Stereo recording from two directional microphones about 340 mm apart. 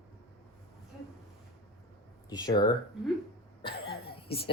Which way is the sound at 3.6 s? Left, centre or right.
Centre.